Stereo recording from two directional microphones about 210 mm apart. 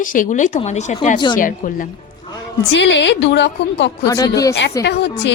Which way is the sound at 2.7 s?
55° left (ahead or behind).